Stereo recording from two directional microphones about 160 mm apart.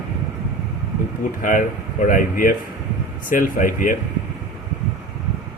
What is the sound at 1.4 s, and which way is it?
Speech, 55° left (ahead or behind).